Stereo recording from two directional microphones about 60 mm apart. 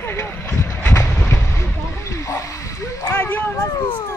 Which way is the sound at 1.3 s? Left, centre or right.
Left.